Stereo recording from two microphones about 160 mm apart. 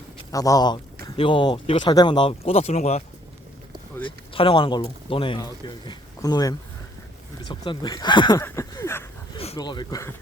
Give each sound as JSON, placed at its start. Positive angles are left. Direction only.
{"t": 0.3, "sound": "speech", "side_deg": 20}
{"t": 4.0, "sound": "speech", "side_deg": 35}
{"t": 8.4, "sound": "a sound", "side_deg": 20}
{"t": 9.6, "sound": "speech", "side_deg": 25}